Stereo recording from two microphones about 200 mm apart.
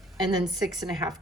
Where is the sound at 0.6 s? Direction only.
20° right (ahead or behind).